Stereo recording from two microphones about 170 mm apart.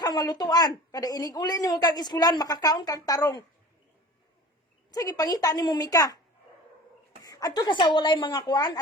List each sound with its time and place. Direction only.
0.0 s a woman's voice: 25° left (ahead or behind)
4.9 s a woman's voice: 20° left (ahead or behind)
7.2 s a woman's voice: 20° left (ahead or behind)